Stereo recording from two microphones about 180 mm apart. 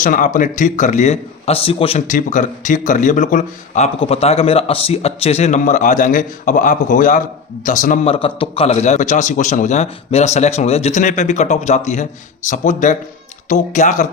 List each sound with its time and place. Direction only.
0.0 s a man's voice: 50° left (ahead or behind)
2.0 s a man's voice: 45° left (ahead or behind)
4.0 s a man's voice: 35° left (ahead or behind)
8.0 s a man's voice: 30° left (ahead or behind)